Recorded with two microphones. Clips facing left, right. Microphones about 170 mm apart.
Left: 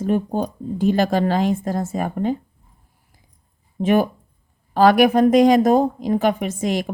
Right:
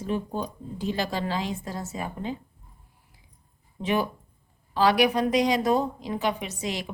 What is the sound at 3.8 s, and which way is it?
Speech, 50° left (ahead or behind).